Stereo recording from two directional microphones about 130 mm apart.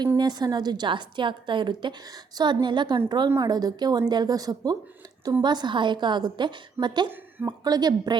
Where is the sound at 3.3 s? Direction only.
25° right (ahead or behind).